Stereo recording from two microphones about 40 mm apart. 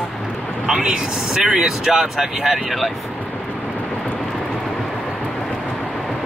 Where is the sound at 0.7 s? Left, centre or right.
Centre.